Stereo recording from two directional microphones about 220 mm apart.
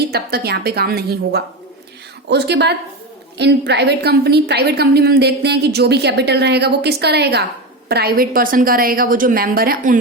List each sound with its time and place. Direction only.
0.0 s a woman's voice: 45° right (ahead or behind)